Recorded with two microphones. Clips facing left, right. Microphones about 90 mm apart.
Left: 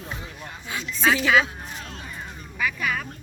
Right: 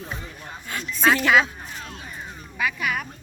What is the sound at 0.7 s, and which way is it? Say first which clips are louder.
Speech: right 2 dB; centre (ahead or behind).